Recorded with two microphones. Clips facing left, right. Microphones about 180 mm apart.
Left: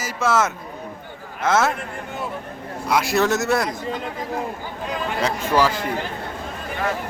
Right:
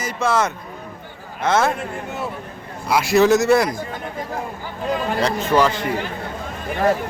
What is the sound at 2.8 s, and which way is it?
Speech, centre (ahead or behind).